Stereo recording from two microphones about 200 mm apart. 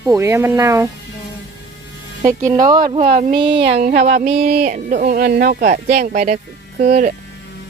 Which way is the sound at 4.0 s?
35° right (ahead or behind).